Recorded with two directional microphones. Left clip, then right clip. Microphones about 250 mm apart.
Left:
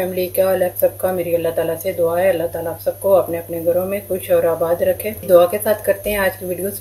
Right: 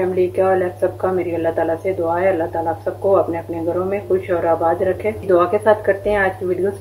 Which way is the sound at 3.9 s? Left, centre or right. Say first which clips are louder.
Even; left.